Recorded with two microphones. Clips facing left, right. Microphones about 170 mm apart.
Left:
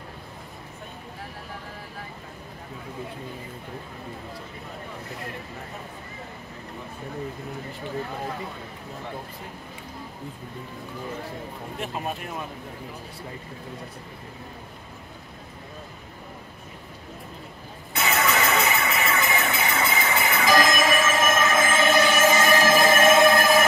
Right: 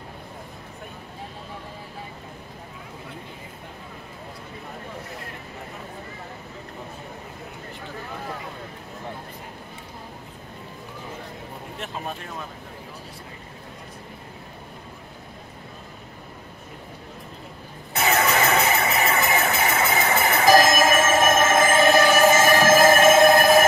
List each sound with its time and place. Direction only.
17.9 s music: 40° right (ahead or behind)
19.3 s train: 40° right (ahead or behind)